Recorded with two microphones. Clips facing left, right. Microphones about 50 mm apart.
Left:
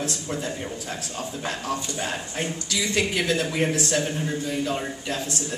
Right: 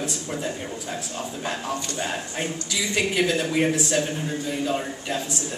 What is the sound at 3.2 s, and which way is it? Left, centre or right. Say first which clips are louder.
A man's voice: right 2 dB; centre.